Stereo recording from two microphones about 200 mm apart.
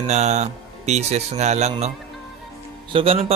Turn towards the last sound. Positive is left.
turn(degrees=-30)  # may be behind; listen again after turning